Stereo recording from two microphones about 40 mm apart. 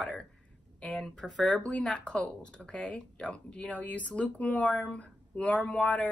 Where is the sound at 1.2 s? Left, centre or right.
Centre.